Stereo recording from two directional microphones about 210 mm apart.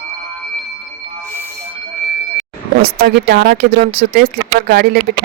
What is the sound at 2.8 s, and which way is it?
Speech, 45° right (ahead or behind).